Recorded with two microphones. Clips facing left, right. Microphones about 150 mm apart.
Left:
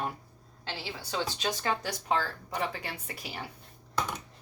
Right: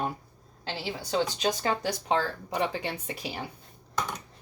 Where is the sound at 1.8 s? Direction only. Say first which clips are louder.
Right 3 dB; 20° right (ahead or behind).